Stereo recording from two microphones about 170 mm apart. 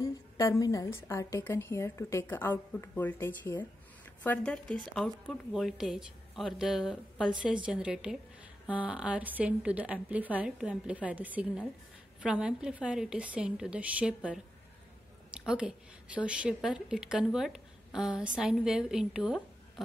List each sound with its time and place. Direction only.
0.0 s a woman's voice: 20° left (ahead or behind); by 19.8 s centre (ahead or behind)